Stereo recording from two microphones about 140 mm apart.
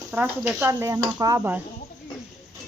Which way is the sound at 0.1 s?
10° right (ahead or behind).